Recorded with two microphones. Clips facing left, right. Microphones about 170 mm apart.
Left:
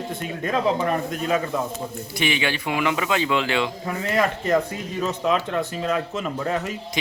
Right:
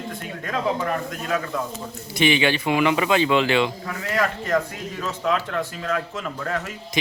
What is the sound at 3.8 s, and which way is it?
A man's voice, 25° left (ahead or behind).